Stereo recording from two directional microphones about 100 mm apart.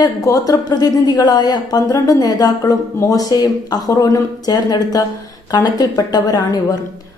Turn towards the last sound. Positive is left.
turn(degrees=40)  # may be behind; listen again after turning